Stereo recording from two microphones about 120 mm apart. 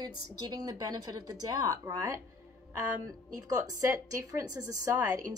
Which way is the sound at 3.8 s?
25° right (ahead or behind).